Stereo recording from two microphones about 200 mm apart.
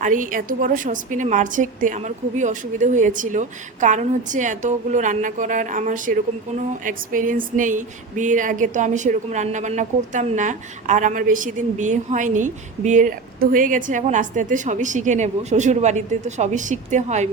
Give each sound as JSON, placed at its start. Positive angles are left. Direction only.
{"t": 0.0, "sound": "speech", "side_deg": -40}